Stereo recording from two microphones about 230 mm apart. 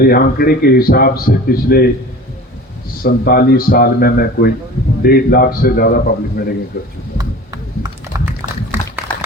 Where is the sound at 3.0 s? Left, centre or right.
Left.